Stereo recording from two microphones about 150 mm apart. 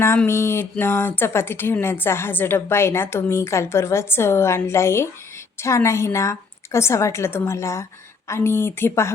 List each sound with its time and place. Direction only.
0.3 s a woman's voice: 15° left (ahead or behind)